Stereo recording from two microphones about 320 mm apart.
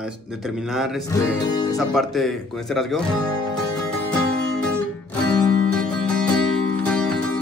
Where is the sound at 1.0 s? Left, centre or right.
Centre.